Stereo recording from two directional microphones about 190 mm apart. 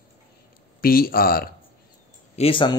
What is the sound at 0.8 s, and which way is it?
Speech, 50° left (ahead or behind).